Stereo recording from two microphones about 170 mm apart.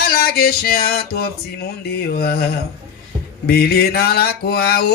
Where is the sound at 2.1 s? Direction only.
65° left (ahead or behind).